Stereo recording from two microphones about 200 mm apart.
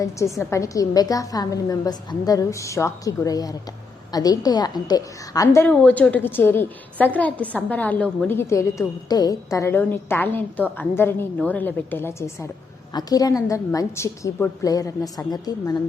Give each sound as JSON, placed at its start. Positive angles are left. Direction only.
{"t": 0.3, "sound": "a woman's voice", "side_deg": 15}